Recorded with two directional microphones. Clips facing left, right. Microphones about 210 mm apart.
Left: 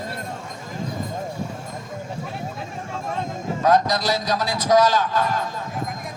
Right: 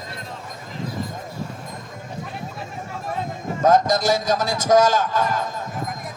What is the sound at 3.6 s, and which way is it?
A man's voice, 45° right (ahead or behind).